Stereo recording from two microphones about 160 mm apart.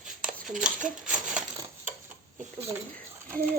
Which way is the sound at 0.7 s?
55° right (ahead or behind).